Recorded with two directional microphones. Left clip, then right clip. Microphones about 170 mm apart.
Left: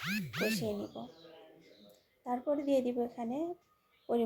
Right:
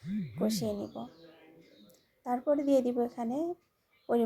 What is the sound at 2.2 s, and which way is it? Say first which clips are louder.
A woman's voice: right 4 dB; 15° right (ahead or behind).